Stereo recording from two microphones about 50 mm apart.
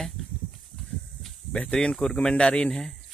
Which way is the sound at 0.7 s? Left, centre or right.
Centre.